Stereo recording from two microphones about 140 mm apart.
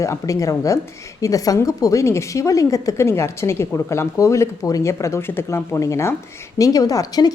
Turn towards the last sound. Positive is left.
turn(degrees=25)  # may be behind; listen again after turning